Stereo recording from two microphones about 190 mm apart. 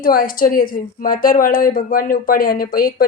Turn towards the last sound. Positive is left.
turn(degrees=50)  # may be behind; listen again after turning